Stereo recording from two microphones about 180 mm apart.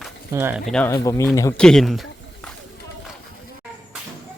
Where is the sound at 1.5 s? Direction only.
5° left (ahead or behind).